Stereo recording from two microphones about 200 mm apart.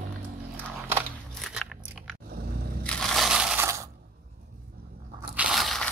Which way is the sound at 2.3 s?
50° right (ahead or behind).